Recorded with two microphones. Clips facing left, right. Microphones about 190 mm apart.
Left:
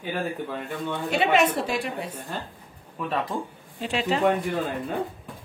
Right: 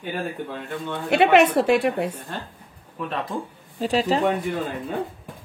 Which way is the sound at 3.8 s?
35° right (ahead or behind).